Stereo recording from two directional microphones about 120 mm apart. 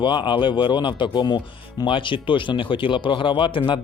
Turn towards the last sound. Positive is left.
turn(degrees=45)  # may be behind; listen again after turning